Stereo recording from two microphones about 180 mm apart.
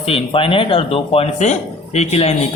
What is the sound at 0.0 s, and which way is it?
Speech, 30° left (ahead or behind).